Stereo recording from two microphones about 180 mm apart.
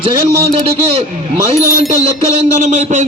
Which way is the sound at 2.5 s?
40° right (ahead or behind).